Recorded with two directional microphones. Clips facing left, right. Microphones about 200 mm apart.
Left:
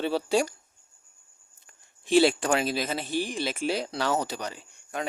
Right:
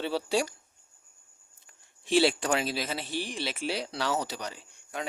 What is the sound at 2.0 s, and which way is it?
Speech, 50° left (ahead or behind).